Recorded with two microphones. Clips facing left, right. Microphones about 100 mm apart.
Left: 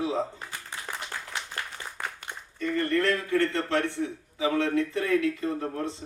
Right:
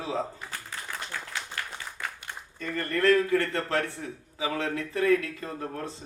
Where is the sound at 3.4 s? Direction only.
25° left (ahead or behind).